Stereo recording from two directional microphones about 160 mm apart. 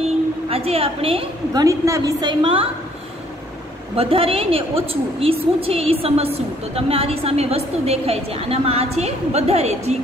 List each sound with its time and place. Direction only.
0.5 s a woman's voice: 35° right (ahead or behind)
1.6 s a woman's voice: 20° right (ahead or behind)
3.9 s a woman's voice: 35° right (ahead or behind)